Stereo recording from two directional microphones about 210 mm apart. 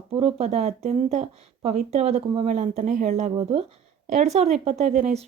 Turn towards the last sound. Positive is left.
turn(degrees=-30)  # may be behind; listen again after turning